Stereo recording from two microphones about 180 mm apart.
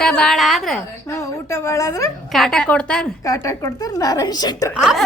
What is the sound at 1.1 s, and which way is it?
A woman's voice, 15° left (ahead or behind).